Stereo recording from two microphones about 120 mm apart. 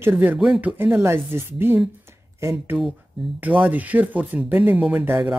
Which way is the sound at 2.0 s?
20° right (ahead or behind).